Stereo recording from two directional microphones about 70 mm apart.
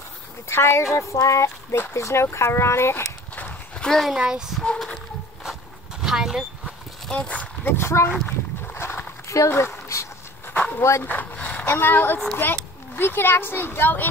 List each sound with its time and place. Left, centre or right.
0.5 s speech: left
0.9 s speech: left
3.3 s livestock: left
3.8 s speech: centre
4.2 s speech: centre
4.7 s horse: centre
6.0 s a sound: centre
7.1 s speech: centre
7.7 s speech: left
8.8 s a sound: left
9.3 s dog: left
10.8 s speech: left
11.1 s vehicle: left
11.6 s a child's voice: left